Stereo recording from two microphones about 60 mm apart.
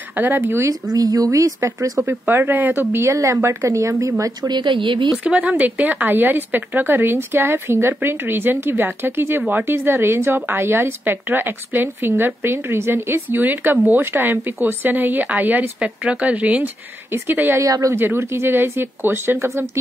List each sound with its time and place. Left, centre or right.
0.1 s speech: right
0.4 s speech: right
0.9 s speech: right
2.0 s speech: right
3.1 s speech: right
5.1 s speech: centre
15.8 s speech: centre
17.6 s speech: right
17.9 s speech: right